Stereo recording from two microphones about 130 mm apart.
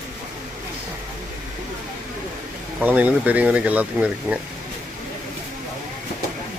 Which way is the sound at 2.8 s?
10° right (ahead or behind).